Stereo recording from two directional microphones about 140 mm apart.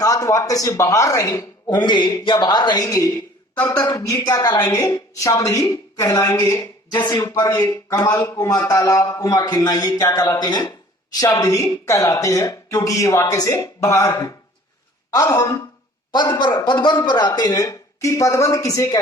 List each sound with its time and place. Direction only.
0.0 s a woman's voice: 20° left (ahead or behind)